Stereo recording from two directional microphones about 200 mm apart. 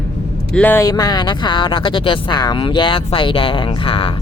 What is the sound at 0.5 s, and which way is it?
Speech, 10° left (ahead or behind).